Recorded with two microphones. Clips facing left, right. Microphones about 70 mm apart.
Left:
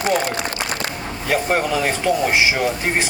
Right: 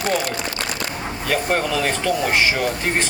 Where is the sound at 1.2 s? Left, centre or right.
Centre.